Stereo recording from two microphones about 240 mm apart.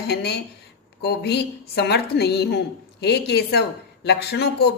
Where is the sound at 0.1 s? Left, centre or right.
Left.